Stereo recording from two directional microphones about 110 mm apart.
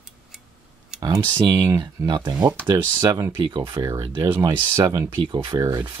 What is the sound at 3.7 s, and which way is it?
Speech, 25° right (ahead or behind).